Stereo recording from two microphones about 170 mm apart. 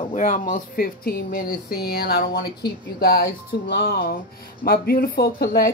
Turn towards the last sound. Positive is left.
turn(degrees=65)  # may be behind; listen again after turning